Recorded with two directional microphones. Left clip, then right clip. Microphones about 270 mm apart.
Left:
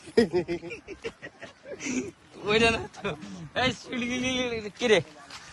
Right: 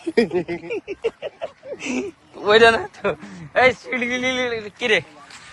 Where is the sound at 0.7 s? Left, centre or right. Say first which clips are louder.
Right 13 dB; centre.